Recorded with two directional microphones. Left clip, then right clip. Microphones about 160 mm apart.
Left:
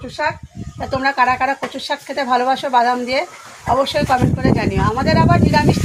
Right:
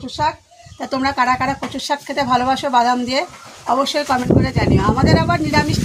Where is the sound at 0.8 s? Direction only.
30° right (ahead or behind).